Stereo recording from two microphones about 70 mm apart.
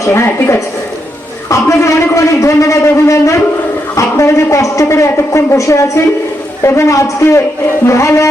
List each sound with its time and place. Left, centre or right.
0.0 s a man's voice: left